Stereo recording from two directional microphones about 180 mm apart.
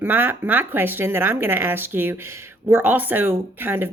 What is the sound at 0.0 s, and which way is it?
Speech, 10° right (ahead or behind).